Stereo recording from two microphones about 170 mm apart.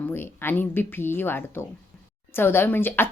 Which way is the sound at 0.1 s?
15° left (ahead or behind).